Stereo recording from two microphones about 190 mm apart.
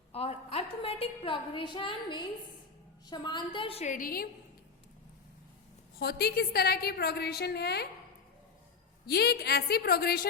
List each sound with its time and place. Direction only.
0.1 s a woman's voice: 30° left (ahead or behind); by 4.3 s 50° left (ahead or behind)
6.0 s a woman's voice: 55° left (ahead or behind)
9.0 s a woman's voice: 60° left (ahead or behind)